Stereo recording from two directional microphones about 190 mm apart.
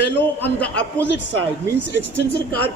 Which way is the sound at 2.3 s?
60° left (ahead or behind).